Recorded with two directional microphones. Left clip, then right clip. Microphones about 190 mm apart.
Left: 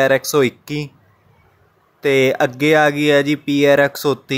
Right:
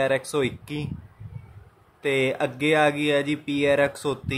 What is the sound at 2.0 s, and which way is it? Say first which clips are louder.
Speech: left 9 dB; 30° left (ahead or behind).